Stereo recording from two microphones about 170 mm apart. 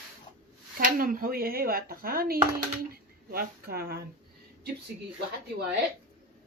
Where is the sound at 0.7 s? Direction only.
55° right (ahead or behind).